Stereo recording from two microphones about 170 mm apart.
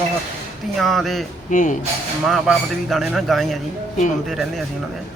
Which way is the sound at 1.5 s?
50° left (ahead or behind).